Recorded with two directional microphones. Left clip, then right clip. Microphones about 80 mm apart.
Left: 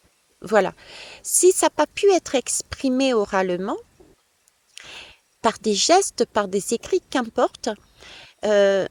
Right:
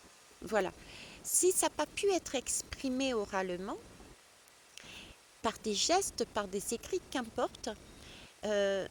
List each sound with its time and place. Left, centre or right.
0.4 s speech: left